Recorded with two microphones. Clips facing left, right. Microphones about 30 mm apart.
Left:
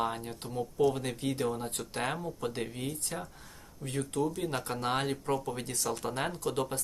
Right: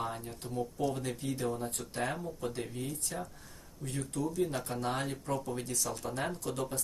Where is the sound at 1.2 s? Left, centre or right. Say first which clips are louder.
Left 3 dB; left.